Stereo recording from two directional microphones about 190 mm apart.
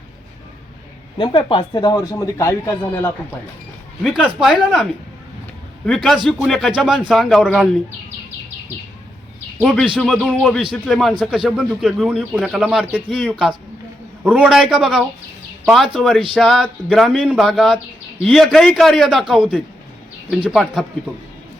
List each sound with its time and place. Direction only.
1.2 s speech: 25° left (ahead or behind)
4.0 s speech: 5° right (ahead or behind)
9.6 s speech: 5° right (ahead or behind)
14.3 s speech: 5° right (ahead or behind)